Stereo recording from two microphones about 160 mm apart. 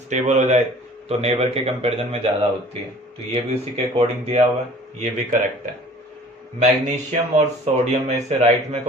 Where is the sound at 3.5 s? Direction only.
40° right (ahead or behind).